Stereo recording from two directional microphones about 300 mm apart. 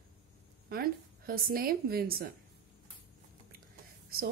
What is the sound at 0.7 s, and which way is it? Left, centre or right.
A woman's voice, right.